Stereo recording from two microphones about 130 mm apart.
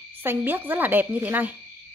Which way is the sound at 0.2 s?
15° right (ahead or behind).